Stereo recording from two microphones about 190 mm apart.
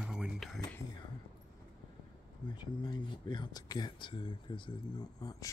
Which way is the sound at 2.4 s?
25° left (ahead or behind).